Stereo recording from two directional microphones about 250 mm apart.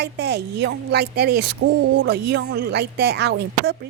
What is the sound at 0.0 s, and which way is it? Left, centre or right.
A woman's voice, right.